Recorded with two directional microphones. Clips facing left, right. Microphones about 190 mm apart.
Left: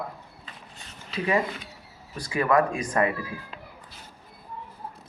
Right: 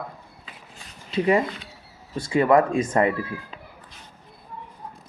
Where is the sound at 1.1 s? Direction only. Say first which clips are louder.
Right 5 dB; 30° right (ahead or behind).